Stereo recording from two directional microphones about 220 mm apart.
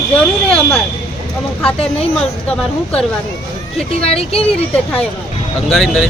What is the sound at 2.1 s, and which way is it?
Speech, 5° left (ahead or behind).